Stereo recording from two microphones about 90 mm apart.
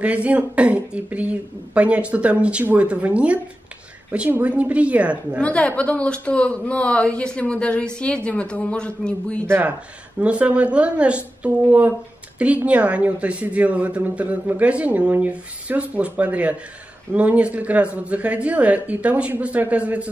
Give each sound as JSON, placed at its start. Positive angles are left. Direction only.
{"t": 0.0, "sound": "a woman's voice", "side_deg": -15}
{"t": 5.4, "sound": "speech", "side_deg": 15}
{"t": 9.5, "sound": "a woman's voice", "side_deg": -20}